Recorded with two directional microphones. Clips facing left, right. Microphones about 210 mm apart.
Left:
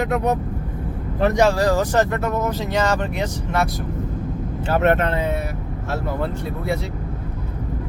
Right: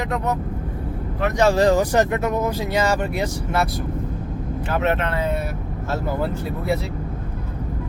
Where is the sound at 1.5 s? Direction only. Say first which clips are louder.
Right 2 dB; 20° right (ahead or behind).